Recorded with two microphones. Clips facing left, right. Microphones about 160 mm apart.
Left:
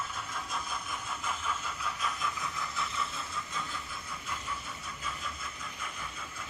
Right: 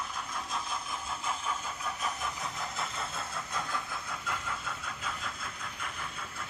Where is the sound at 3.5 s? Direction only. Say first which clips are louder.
Right 4 dB; 70° right (ahead or behind); by 5.1 s 85° right.